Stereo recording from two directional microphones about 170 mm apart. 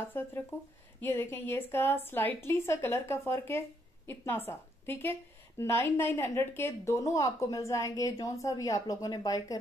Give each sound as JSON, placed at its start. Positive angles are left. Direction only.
{"t": 0.2, "sound": "a woman's voice", "side_deg": 15}